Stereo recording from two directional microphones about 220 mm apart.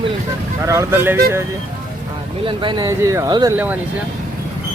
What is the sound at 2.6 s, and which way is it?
Speech, 20° right (ahead or behind).